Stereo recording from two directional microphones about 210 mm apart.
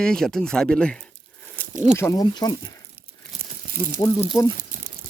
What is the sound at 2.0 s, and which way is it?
Speech, 15° left (ahead or behind).